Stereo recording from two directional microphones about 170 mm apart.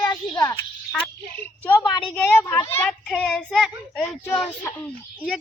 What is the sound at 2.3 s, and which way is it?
A child's voice, 10° left (ahead or behind).